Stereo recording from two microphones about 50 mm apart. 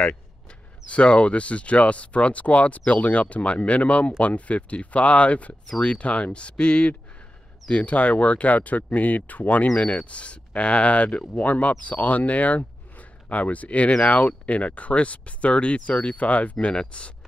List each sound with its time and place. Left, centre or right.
0.8 s speech: left